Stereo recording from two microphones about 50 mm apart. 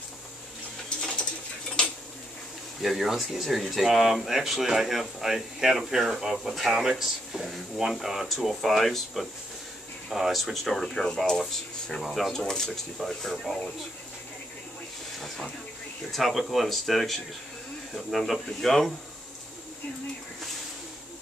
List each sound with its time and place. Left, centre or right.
0.8 s a sound: centre
2.8 s speech: centre
15.1 s speech: centre